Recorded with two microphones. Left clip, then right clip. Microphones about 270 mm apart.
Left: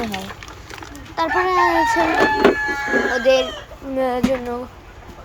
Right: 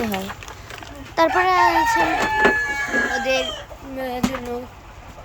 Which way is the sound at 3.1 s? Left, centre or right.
Centre.